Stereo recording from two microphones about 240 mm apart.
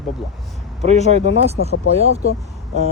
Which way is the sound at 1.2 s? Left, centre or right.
Left.